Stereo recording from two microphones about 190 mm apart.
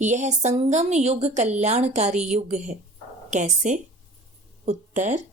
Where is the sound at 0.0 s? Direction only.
40° right (ahead or behind).